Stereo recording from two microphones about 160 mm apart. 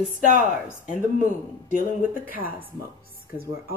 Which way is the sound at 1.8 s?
60° left (ahead or behind).